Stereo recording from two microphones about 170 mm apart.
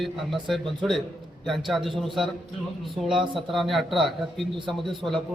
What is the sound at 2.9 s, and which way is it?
A man's voice, centre (ahead or behind).